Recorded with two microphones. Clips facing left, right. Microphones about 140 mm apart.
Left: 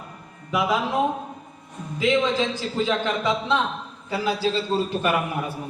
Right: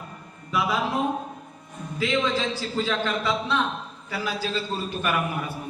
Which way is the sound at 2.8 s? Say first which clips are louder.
Left 4 dB; 20° left (ahead or behind).